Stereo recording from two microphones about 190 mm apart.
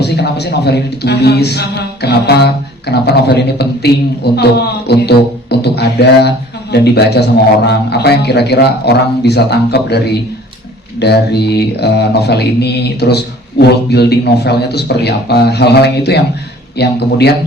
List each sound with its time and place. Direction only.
0.0 s mantra: 60° left (ahead or behind)